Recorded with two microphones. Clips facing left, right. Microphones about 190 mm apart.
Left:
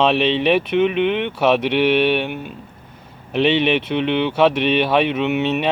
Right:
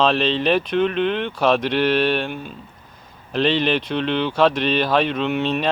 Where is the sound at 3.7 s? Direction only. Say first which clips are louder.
Left 3 dB; 5° left (ahead or behind).